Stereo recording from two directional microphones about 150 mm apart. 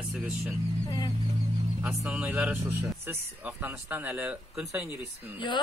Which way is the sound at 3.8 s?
15° right (ahead or behind).